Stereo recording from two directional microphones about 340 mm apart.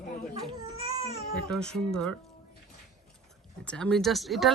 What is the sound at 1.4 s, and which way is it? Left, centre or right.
Speech, centre.